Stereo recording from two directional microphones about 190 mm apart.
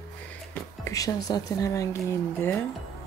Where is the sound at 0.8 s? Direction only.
20° left (ahead or behind).